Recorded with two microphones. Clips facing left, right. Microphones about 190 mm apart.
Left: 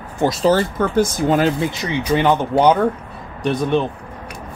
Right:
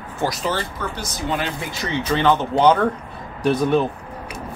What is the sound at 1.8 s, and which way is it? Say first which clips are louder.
Speech: left 1 dB; 15° left (ahead or behind).